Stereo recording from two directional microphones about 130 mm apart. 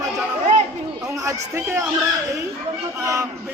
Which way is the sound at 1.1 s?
20° right (ahead or behind).